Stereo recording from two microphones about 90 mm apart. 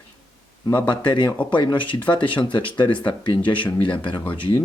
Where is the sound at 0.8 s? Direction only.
60° left (ahead or behind).